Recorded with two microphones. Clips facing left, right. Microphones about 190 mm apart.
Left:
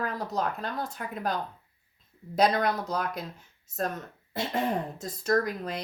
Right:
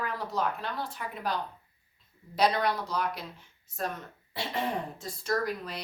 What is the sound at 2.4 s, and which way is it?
A woman's voice, 45° left (ahead or behind).